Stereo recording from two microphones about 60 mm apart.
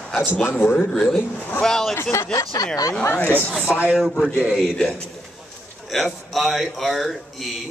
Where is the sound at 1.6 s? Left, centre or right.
Centre.